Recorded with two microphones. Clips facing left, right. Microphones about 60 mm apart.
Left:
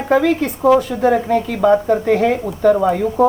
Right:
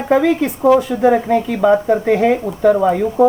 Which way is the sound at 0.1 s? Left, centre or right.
Centre.